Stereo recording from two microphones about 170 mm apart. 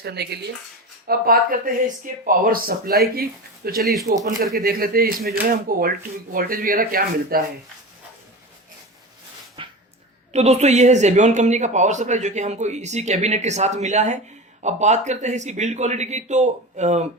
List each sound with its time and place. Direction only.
0.0 s speech: 75° right (ahead or behind)
1.0 s speech: 60° right (ahead or behind)
9.6 s dog: 30° right (ahead or behind)
10.3 s speech: 40° right (ahead or behind)